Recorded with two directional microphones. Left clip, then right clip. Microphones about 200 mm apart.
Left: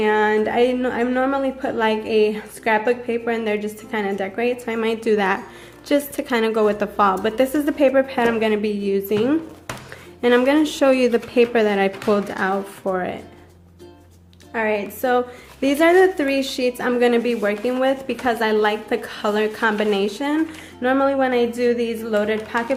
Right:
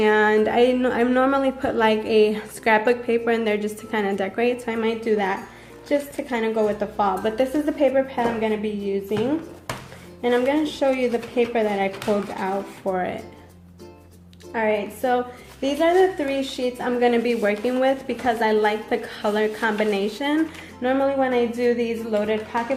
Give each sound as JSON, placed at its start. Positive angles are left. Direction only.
{"t": 0.0, "sound": "a woman's voice", "side_deg": 0}
{"t": 4.9, "sound": "a woman's voice", "side_deg": 25}
{"t": 10.2, "sound": "a woman's voice", "side_deg": 30}
{"t": 12.4, "sound": "a woman's voice", "side_deg": 20}
{"t": 14.5, "sound": "a woman's voice", "side_deg": 10}
{"t": 15.6, "sound": "a woman's voice", "side_deg": 30}
{"t": 17.2, "sound": "a woman's voice", "side_deg": 5}